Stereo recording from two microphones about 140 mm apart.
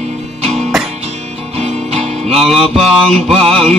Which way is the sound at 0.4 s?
50° right (ahead or behind).